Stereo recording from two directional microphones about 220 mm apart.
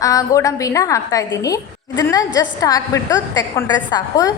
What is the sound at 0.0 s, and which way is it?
A woman's voice, 15° left (ahead or behind).